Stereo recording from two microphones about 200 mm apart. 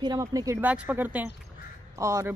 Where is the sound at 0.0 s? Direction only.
20° right (ahead or behind).